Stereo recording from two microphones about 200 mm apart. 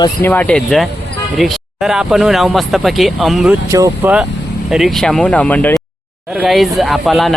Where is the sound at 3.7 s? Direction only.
15° right (ahead or behind).